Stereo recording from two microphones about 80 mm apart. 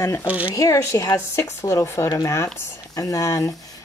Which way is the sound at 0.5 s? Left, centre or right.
Left.